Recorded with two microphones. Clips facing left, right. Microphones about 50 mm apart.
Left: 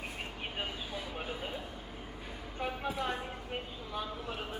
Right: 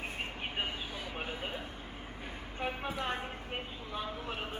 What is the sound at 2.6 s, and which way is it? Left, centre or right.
A woman's voice, right.